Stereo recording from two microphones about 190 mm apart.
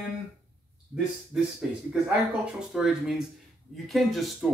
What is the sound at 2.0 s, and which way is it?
Speech, 5° right (ahead or behind).